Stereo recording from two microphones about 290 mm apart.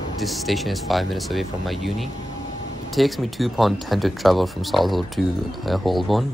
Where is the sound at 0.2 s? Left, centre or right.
Centre.